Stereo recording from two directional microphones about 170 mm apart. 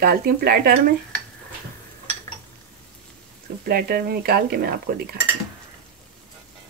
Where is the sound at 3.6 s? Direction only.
65° right (ahead or behind).